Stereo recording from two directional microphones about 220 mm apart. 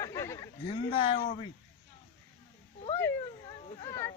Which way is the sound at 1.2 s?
30° left (ahead or behind).